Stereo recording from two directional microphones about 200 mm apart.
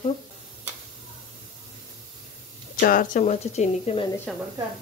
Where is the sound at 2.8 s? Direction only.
45° left (ahead or behind).